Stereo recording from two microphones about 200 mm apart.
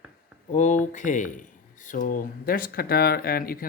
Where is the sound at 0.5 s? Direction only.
40° left (ahead or behind).